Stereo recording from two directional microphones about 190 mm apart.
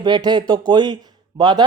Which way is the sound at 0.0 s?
20° right (ahead or behind).